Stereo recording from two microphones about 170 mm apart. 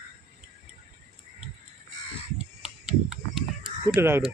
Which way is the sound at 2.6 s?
5° right (ahead or behind).